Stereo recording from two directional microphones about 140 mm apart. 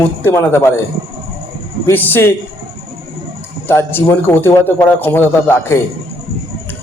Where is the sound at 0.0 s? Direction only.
15° left (ahead or behind).